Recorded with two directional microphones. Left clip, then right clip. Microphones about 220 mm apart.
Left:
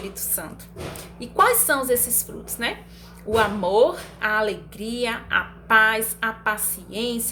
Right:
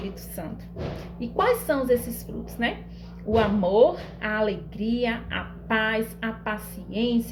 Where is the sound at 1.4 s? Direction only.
10° left (ahead or behind).